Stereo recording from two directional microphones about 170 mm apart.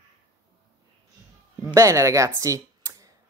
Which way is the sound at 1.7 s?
20° right (ahead or behind).